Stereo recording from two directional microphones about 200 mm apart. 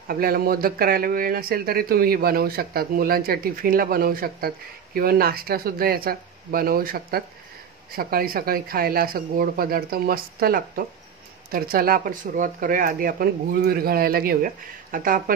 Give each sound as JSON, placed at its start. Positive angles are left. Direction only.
{"t": 0.1, "sound": "speech", "side_deg": -50}